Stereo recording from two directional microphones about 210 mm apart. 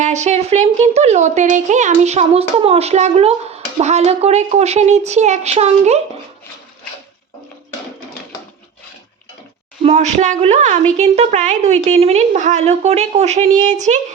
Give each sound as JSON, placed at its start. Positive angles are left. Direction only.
{"t": 0.0, "sound": "speech", "side_deg": -35}
{"t": 9.8, "sound": "speech", "side_deg": -30}